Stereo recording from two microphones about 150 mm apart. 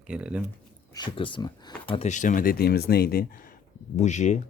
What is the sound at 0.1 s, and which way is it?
Speech, 10° right (ahead or behind).